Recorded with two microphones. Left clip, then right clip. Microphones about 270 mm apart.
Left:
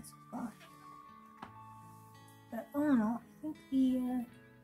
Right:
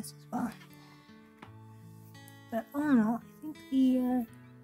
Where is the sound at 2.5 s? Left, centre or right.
Right.